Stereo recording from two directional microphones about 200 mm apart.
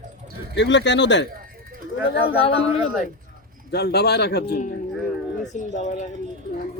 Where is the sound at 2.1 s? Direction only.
30° left (ahead or behind).